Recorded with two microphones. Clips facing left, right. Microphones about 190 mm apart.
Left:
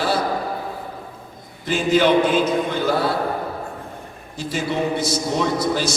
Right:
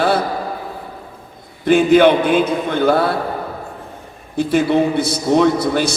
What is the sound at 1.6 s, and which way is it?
A man's voice, 55° right (ahead or behind).